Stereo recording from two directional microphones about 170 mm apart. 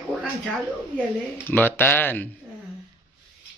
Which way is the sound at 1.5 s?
10° left (ahead or behind).